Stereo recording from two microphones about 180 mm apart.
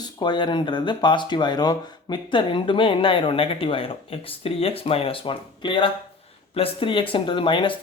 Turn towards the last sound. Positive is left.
turn(degrees=30)  # may be behind; listen again after turning